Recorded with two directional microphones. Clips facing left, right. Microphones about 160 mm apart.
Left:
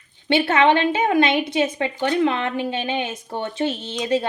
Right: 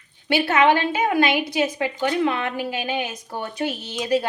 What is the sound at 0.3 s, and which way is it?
A woman's voice, 25° left (ahead or behind).